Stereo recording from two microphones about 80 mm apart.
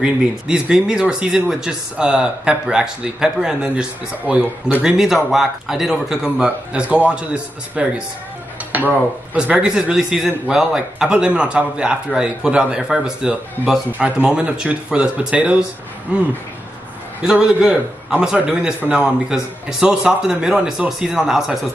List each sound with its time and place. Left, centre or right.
0.0 s speech: centre
4.8 s speech: centre